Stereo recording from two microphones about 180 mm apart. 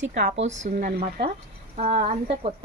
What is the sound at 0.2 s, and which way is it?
Speech, 70° right (ahead or behind).